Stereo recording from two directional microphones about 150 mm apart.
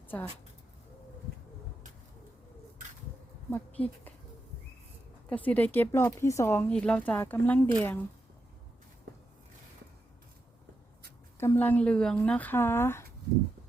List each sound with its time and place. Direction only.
3.5 s speech: 10° left (ahead or behind)
5.3 s speech: 10° left (ahead or behind)
6.7 s speech: 5° left (ahead or behind)
11.3 s speech: 15° left (ahead or behind)